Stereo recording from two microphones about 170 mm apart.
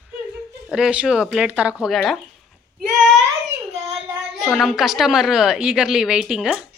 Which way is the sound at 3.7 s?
35° right (ahead or behind).